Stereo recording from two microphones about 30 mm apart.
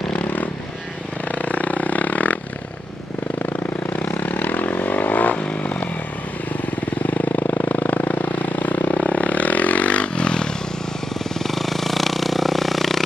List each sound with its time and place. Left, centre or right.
1.4 s a sound: left
3.4 s vehicle: left
7.2 s vehicle: left
8.9 s vehicle: left
10.1 s motorcycle: left
11.3 s a sound: centre